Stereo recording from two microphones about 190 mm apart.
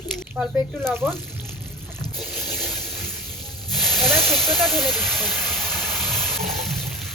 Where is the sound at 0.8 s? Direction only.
10° right (ahead or behind).